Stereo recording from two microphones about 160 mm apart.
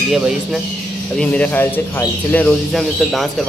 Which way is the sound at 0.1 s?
5° right (ahead or behind).